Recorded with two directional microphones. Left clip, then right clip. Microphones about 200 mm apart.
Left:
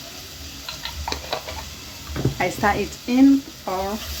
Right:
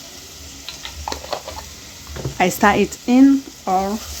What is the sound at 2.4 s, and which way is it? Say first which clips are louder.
Speech: right 6 dB; 60° right (ahead or behind).